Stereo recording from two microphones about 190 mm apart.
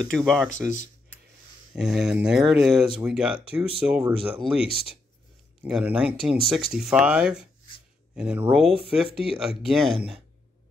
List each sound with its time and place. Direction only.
0.1 s speech: centre (ahead or behind)
0.5 s speech: 40° left (ahead or behind)
1.8 s speech: centre (ahead or behind)
4.6 s speech: 30° left (ahead or behind)
5.6 s speech: 5° right (ahead or behind)